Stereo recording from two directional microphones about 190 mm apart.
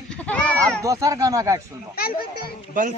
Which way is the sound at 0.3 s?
5° left (ahead or behind).